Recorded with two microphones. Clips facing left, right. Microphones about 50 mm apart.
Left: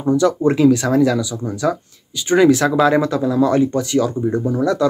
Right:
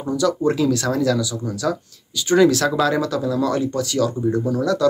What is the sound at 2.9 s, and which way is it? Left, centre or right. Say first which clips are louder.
Speech: left 4 dB; left.